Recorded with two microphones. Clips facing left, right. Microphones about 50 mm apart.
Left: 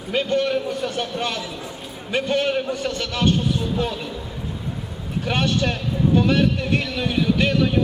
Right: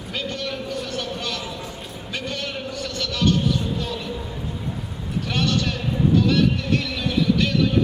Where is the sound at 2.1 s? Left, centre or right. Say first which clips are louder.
Left 9 dB; left.